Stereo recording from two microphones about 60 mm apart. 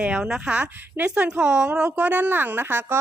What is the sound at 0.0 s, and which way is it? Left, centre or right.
A woman's voice, centre.